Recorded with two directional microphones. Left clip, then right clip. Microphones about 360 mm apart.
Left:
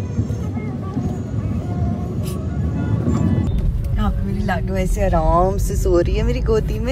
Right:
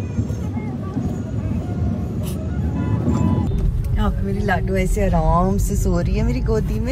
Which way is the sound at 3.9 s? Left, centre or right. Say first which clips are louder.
Right 1 dB; centre.